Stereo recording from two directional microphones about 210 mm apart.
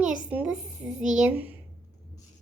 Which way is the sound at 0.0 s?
5° right (ahead or behind).